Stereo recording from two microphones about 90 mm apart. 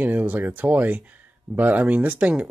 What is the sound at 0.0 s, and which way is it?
Speech, 15° right (ahead or behind).